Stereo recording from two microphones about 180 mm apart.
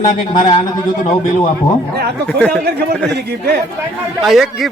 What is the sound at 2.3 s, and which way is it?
Speech, 10° left (ahead or behind).